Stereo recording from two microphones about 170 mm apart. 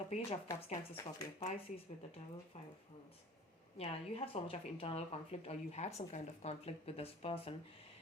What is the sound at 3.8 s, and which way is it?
Speech, 35° left (ahead or behind).